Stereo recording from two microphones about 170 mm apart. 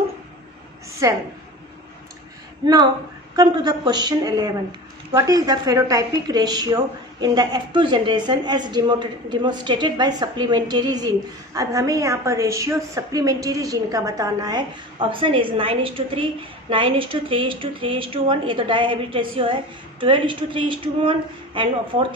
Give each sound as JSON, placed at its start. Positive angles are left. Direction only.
{"t": 1.0, "sound": "a woman's voice", "side_deg": -20}
{"t": 2.6, "sound": "a woman's voice", "side_deg": -25}